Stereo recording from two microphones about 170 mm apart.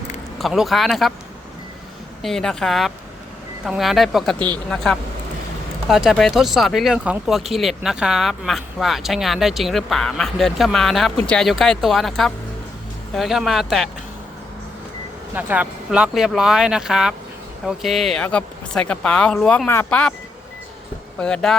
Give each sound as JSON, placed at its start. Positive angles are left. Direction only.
{"t": 0.3, "sound": "speech", "side_deg": 0}
{"t": 2.2, "sound": "speech", "side_deg": 5}
{"t": 15.4, "sound": "speech", "side_deg": -10}
{"t": 21.2, "sound": "speech", "side_deg": 5}